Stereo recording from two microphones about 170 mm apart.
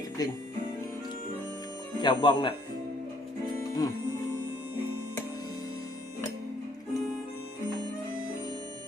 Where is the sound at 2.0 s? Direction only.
25° left (ahead or behind).